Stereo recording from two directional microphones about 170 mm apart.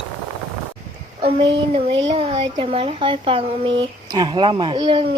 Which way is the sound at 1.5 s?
30° right (ahead or behind).